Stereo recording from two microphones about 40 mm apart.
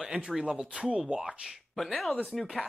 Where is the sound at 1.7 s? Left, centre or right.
Centre.